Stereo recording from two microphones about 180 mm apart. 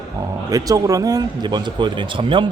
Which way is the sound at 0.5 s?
20° right (ahead or behind).